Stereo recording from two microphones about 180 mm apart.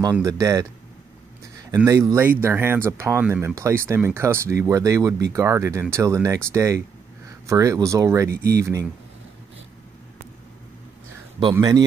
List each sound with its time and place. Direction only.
0.1 s speech: 15° right (ahead or behind)
1.9 s speech: 15° right (ahead or behind)
11.5 s a man's voice: 20° right (ahead or behind)